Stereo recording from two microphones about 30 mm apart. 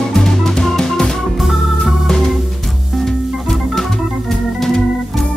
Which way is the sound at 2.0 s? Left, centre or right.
Centre.